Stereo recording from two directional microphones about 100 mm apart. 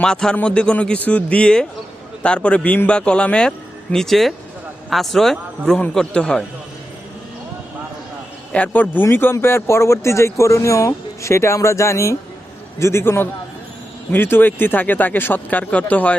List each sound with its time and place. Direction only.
0.0 s a man's voice: 5° left (ahead or behind)
8.5 s a man's voice: 15° left (ahead or behind)